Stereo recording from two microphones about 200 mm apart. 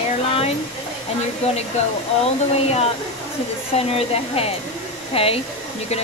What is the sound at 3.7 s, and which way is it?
Speech, 30° left (ahead or behind).